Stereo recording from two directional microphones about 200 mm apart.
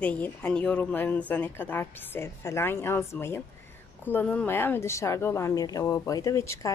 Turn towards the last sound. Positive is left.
turn(degrees=15)  # may be behind; listen again after turning